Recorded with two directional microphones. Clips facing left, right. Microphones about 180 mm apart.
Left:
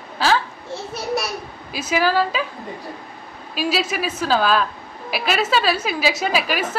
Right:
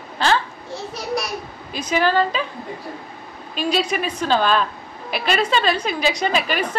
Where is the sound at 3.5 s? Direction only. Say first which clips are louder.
Right 1 dB; 5° left (ahead or behind).